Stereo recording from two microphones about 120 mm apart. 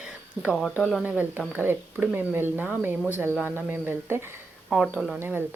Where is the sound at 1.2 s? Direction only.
15° right (ahead or behind).